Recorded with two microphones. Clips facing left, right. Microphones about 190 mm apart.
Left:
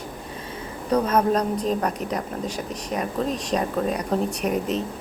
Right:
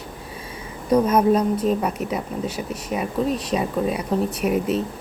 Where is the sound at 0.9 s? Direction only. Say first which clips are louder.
Right 4 dB; 10° right (ahead or behind).